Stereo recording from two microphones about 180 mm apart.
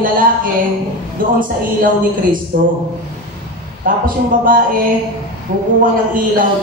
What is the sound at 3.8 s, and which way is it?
Speech, 50° right (ahead or behind).